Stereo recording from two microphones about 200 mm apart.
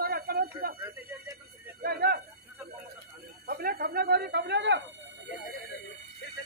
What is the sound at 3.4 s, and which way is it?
Speech, 45° right (ahead or behind).